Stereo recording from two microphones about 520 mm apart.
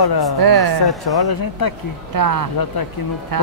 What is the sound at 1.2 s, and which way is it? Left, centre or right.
Speech, left.